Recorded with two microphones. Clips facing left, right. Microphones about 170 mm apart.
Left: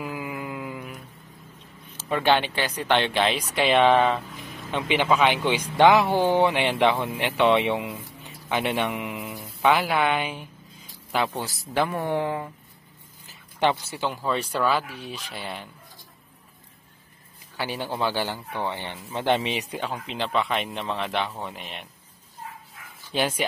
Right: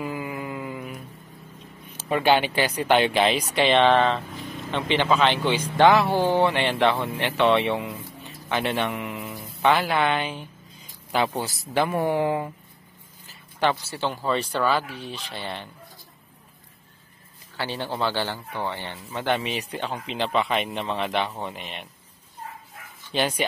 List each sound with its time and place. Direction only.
0.0 s a sound: 5° left (ahead or behind)
2.0 s speech: 10° right (ahead or behind); by 10.4 s 10° left (ahead or behind)
11.1 s speech: 5° right (ahead or behind)
13.3 s a sound: 20° left (ahead or behind)
13.9 s speech: 5° left (ahead or behind)
17.6 s speech: 15° left (ahead or behind)
19.7 s speech: 5° left (ahead or behind)
23.1 s speech: 5° left (ahead or behind)